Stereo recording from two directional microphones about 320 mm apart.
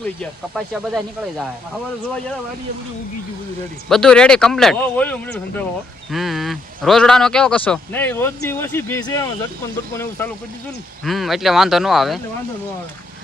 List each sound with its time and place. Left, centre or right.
0.2 s speech: centre
3.8 s speech: centre